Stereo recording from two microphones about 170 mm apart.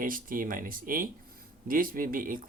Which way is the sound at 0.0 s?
55° right (ahead or behind).